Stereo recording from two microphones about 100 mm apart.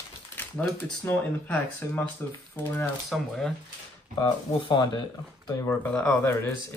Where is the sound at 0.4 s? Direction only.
15° left (ahead or behind).